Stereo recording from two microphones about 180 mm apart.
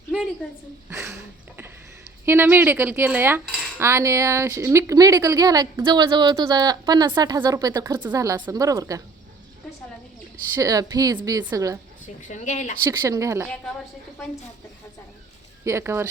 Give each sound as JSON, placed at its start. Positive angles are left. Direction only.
{"t": 0.9, "sound": "a sound", "side_deg": -15}
{"t": 2.2, "sound": "cutlery", "side_deg": -10}
{"t": 8.1, "sound": "a woman's voice", "side_deg": -20}
{"t": 10.6, "sound": "a woman's voice", "side_deg": -20}
{"t": 12.0, "sound": "a woman's voice", "side_deg": 40}
{"t": 12.9, "sound": "cutlery", "side_deg": -15}
{"t": 15.6, "sound": "cutlery", "side_deg": -15}